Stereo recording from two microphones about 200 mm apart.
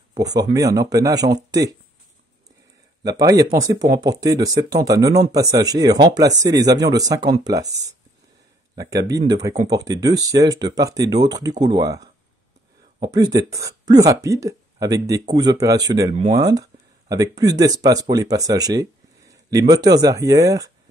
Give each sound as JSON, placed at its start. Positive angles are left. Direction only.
{"t": 0.1, "sound": "speech", "side_deg": -20}
{"t": 3.0, "sound": "speech", "side_deg": -20}